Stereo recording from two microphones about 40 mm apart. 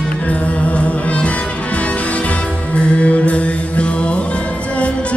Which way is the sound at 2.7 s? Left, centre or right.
Left.